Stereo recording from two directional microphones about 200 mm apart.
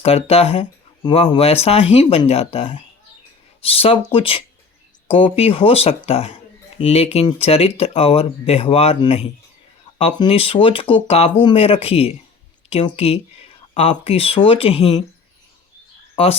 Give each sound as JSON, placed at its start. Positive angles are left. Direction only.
{"t": 0.0, "sound": "speech", "side_deg": 30}